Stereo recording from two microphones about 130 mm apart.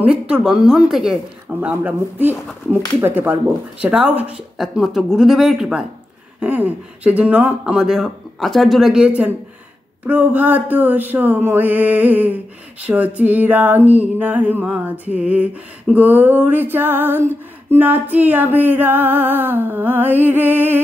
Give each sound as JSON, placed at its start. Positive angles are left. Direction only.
{"t": 0.0, "sound": "a woman's voice", "side_deg": -10}
{"t": 1.6, "sound": "female singing", "side_deg": -15}
{"t": 3.8, "sound": "a woman's voice", "side_deg": -10}
{"t": 6.4, "sound": "female singing", "side_deg": -10}